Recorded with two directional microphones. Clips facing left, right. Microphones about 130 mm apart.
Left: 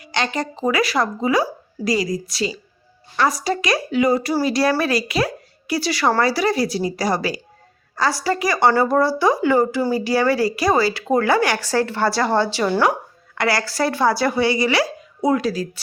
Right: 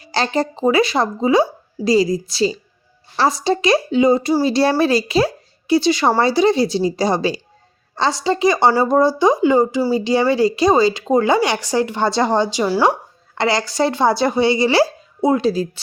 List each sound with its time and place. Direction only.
0.0 s speech: 35° right (ahead or behind); by 12.8 s 10° right (ahead or behind)
13.3 s speech: 25° right (ahead or behind)